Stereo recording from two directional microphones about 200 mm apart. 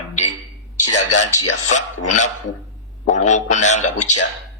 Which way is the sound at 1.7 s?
35° left (ahead or behind).